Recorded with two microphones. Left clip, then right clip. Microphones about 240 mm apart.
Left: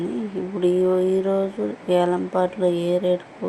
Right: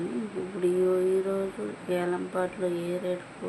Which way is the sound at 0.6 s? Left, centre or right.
Left.